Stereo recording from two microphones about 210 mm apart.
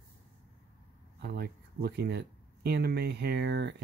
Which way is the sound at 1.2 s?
45° right (ahead or behind).